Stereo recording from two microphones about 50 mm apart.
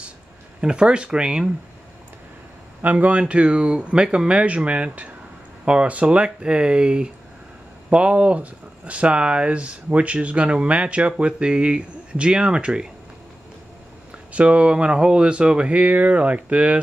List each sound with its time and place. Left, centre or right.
0.6 s speech: centre
2.8 s a man's voice: right
3.2 s speech: right
14.1 s speech: right